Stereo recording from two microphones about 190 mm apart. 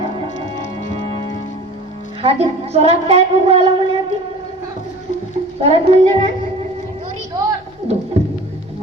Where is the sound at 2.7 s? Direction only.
35° right (ahead or behind).